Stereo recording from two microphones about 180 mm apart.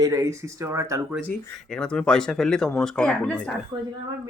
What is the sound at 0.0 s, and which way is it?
Speech, 15° right (ahead or behind).